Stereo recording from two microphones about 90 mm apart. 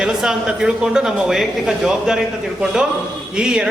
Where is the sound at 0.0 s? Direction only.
10° right (ahead or behind).